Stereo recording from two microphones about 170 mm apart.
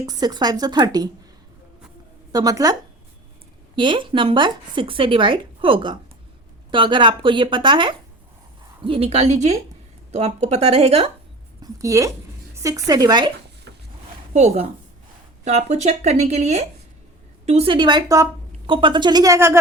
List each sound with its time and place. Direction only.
0.0 s speech: 20° right (ahead or behind)
2.3 s speech: 20° right (ahead or behind)
3.8 s speech: 30° right (ahead or behind)
11.6 s speech: 20° right (ahead or behind)
12.5 s a sound: 20° right (ahead or behind)
12.9 s speech: 25° right (ahead or behind)
13.7 s a sound: 90° right
14.3 s speech: 40° right (ahead or behind); by 19.5 s 15° right (ahead or behind)